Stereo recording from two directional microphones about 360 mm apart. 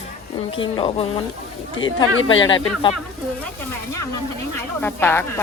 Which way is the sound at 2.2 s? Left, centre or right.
Left.